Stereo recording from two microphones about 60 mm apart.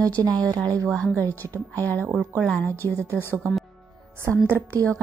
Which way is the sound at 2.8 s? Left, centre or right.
Right.